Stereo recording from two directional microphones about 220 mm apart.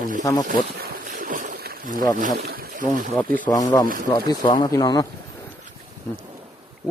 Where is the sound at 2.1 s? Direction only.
40° right (ahead or behind).